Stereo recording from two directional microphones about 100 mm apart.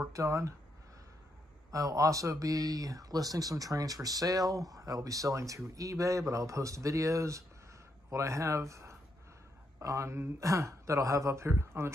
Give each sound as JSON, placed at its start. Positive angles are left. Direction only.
{"t": 0.0, "sound": "speech", "side_deg": -30}
{"t": 1.7, "sound": "speech", "side_deg": -35}